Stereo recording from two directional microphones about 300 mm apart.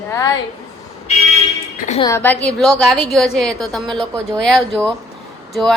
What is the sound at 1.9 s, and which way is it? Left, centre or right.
A woman's voice, centre.